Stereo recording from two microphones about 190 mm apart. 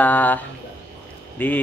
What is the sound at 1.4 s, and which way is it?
Speech, 10° left (ahead or behind).